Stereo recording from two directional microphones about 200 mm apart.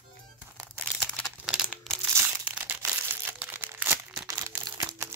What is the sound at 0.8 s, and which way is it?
Crumpling, 5° left (ahead or behind).